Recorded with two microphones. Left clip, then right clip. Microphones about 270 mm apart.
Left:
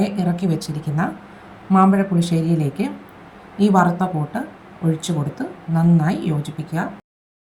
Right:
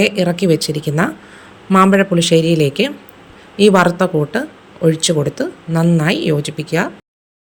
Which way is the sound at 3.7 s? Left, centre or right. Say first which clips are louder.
Right 4 dB; centre.